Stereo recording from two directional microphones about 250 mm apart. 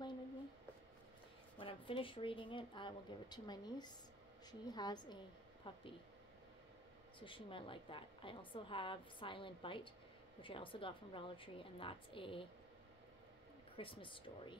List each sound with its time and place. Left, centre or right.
1.6 s a woman's voice: left
7.2 s a woman's voice: left
13.7 s a woman's voice: left